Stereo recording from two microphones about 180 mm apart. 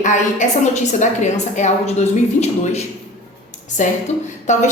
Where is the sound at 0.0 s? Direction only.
45° left (ahead or behind).